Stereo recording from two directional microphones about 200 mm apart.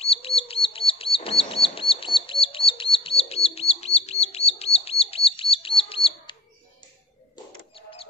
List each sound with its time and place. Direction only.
0.0 s chirp: 30° left (ahead or behind)